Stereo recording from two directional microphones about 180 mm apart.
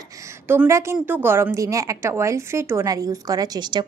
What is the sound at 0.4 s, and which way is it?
A woman's voice, 10° right (ahead or behind).